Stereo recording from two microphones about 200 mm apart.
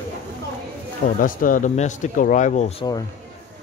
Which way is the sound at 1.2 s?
45° left (ahead or behind).